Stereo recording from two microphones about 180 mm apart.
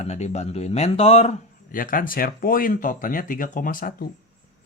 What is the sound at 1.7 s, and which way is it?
Speech, 50° left (ahead or behind).